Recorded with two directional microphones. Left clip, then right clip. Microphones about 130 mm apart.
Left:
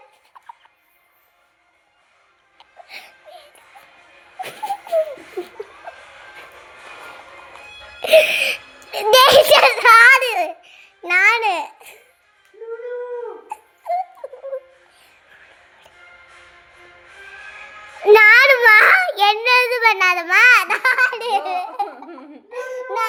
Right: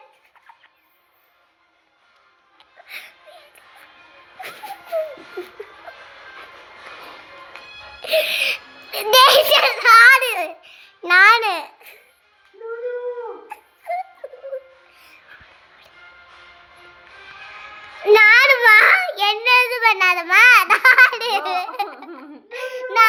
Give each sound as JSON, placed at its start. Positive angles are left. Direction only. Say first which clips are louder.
{"t": 2.6, "sound": "music", "louder": "right 1 dB", "side_deg": 25}
{"t": 4.4, "sound": "music", "louder": "left 7 dB", "side_deg": 35}
{"t": 8.0, "sound": "music", "louder": "left 6 dB", "side_deg": 50}
{"t": 11.1, "sound": "babbling", "louder": "right 3 dB", "side_deg": 10}
{"t": 11.5, "sound": "babbling", "louder": "left 3 dB", "side_deg": 25}
{"t": 13.5, "sound": "a sound", "louder": "left 6 dB", "side_deg": 15}
{"t": 14.2, "sound": "music", "louder": "left 2 dB", "side_deg": 5}
{"t": 18.0, "sound": "child singing", "louder": "left 2 dB", "side_deg": 40}
{"t": 20.2, "sound": "babbling", "louder": "right 1 dB", "side_deg": 25}
{"t": 20.7, "sound": "laughter", "louder": "right 5 dB", "side_deg": 10}
{"t": 22.4, "sound": "child singing", "louder": "even", "side_deg": 25}